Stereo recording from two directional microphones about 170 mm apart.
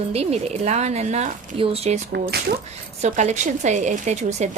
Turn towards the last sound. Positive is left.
turn(degrees=-45)  # may be behind; listen again after turning